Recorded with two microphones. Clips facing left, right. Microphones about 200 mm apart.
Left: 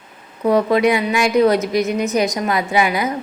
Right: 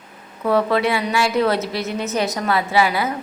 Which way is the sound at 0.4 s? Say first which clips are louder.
Left 3 dB; 15° left (ahead or behind).